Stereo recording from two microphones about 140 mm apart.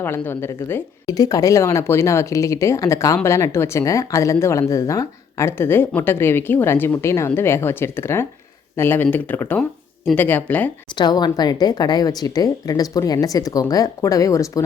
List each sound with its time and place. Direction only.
0.0 s speech: 15° left (ahead or behind)
1.0 s a woman's voice: 25° left (ahead or behind)
10.9 s a woman's voice: 30° left (ahead or behind)